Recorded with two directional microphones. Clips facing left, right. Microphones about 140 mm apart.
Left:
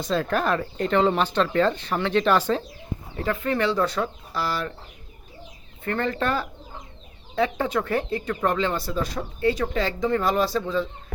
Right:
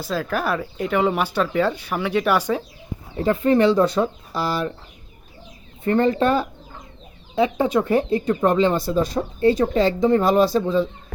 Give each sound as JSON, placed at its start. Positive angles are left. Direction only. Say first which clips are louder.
{"t": 0.0, "sound": "speech", "louder": "even", "side_deg": -5}
{"t": 3.2, "sound": "speech", "louder": "right 8 dB", "side_deg": -25}
{"t": 5.8, "sound": "speech", "louder": "right 7 dB", "side_deg": -20}
{"t": 8.9, "sound": "speech", "louder": "right 7 dB", "side_deg": -30}